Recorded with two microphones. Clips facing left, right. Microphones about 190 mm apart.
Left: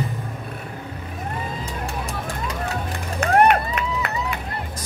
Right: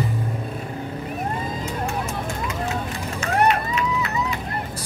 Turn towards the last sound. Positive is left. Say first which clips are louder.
# left 3 dB
turn(degrees=55)  # may be behind; listen again after turning